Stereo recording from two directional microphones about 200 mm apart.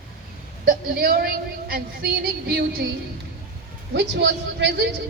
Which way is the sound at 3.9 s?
60° right (ahead or behind).